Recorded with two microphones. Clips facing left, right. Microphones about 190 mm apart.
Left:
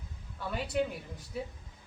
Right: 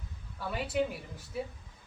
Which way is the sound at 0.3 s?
Centre (ahead or behind).